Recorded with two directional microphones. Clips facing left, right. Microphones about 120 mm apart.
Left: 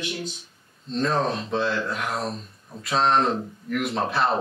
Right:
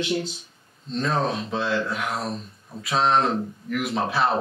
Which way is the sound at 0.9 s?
Centre (ahead or behind).